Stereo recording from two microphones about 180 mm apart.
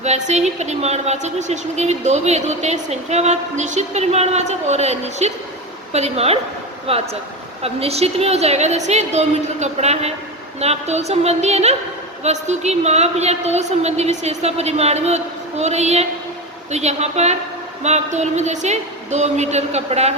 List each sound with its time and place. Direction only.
0.0 s a woman's voice: 40° right (ahead or behind)